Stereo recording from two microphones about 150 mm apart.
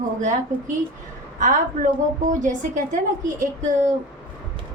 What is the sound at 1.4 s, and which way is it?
Speech, 55° right (ahead or behind).